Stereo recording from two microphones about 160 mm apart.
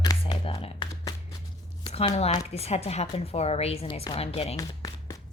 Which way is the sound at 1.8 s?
40° left (ahead or behind).